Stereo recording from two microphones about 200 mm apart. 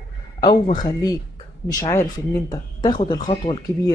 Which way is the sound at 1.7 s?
15° left (ahead or behind).